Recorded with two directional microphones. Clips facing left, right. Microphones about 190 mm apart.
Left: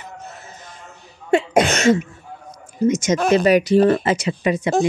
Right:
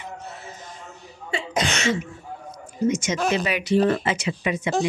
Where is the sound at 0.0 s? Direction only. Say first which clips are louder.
Even; 45° left (ahead or behind).